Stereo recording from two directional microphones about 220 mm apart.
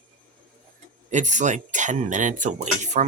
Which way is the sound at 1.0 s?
35° right (ahead or behind).